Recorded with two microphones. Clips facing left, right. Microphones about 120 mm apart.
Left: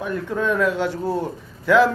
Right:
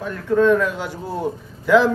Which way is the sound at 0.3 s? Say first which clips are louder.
Right 5 dB; 5° left (ahead or behind).